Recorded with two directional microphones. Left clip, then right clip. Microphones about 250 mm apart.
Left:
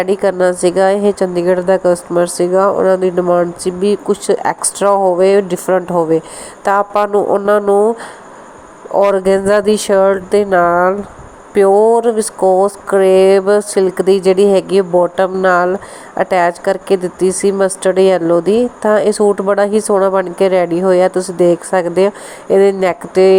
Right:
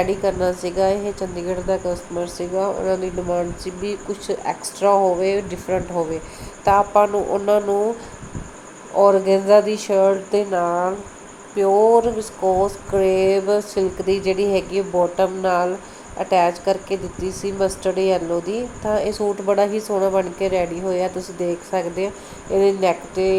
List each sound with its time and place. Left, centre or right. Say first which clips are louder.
0.0 s a woman's voice: left 7 dB; left
9.0 s a woman's voice: left 4 dB; left